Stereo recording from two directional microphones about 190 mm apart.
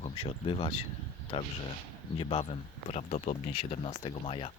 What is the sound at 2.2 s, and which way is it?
Speech, 30° left (ahead or behind).